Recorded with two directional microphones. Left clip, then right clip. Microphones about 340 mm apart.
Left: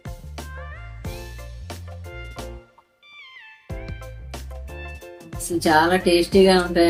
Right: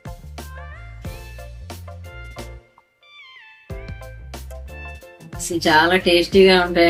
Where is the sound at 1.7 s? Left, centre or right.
Centre.